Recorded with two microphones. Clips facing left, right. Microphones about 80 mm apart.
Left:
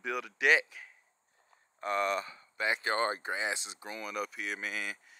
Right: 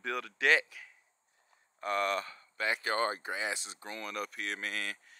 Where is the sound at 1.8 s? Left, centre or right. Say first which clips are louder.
Left 1 dB; centre.